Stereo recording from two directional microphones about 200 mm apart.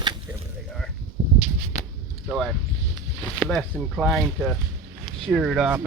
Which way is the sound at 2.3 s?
Centre (ahead or behind).